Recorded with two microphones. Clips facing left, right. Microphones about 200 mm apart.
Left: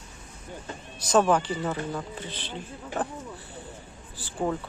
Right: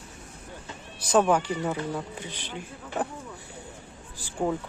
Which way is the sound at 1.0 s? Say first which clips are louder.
Even; 10° right (ahead or behind).